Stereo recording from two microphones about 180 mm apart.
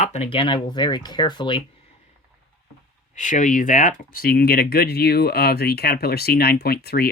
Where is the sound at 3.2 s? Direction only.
45° left (ahead or behind).